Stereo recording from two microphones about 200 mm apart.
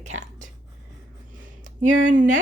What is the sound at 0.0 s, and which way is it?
Whispering, 35° right (ahead or behind).